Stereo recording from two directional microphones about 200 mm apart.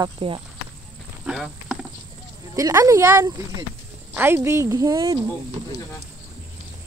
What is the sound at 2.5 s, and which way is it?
Speech, 15° right (ahead or behind).